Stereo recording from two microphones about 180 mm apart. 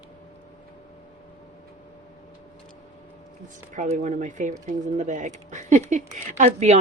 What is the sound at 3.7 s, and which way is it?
Speech, 40° right (ahead or behind).